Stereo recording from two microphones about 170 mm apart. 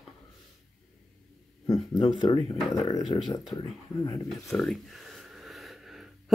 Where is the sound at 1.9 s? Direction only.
25° left (ahead or behind).